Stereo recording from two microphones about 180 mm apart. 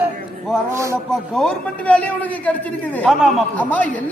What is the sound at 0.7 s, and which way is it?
Music, 15° right (ahead or behind).